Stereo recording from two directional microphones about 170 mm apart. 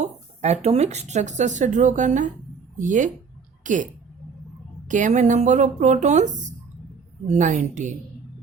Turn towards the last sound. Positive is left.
turn(degrees=-45)  # may be behind; listen again after turning